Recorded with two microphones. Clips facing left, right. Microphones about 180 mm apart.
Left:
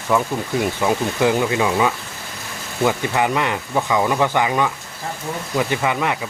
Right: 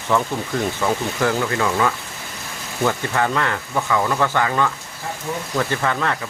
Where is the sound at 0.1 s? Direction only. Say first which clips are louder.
Left 1 dB; 10° left (ahead or behind).